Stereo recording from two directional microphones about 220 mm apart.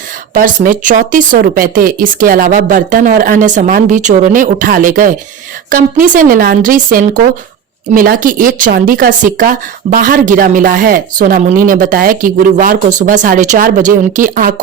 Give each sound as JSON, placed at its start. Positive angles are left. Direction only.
{"t": 0.3, "sound": "speech", "side_deg": -35}